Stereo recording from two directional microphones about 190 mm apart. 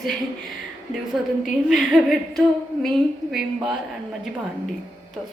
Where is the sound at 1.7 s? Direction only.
Centre (ahead or behind).